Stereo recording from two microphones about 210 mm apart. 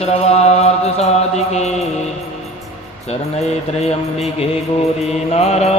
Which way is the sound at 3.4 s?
30° left (ahead or behind).